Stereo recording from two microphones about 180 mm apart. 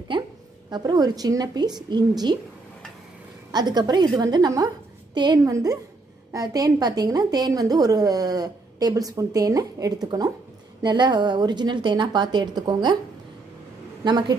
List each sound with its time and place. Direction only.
0.1 s a woman's voice: 25° right (ahead or behind)
3.5 s a woman's voice: 25° right (ahead or behind)
14.0 s a woman's voice: 25° right (ahead or behind)